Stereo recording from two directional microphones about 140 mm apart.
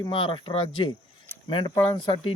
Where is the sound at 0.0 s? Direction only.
35° left (ahead or behind).